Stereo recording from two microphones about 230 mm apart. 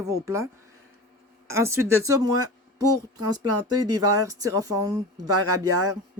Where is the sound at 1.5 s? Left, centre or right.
Centre.